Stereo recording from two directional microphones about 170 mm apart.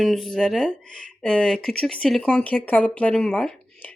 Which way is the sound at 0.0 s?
Centre (ahead or behind).